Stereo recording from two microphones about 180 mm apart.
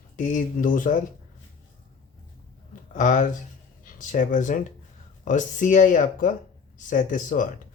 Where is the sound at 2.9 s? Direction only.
45° left (ahead or behind).